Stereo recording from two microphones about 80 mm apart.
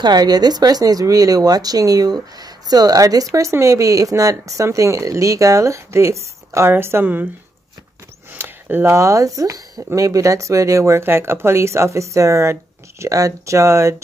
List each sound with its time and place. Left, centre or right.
0.0 s speech: right
8.3 s speech: right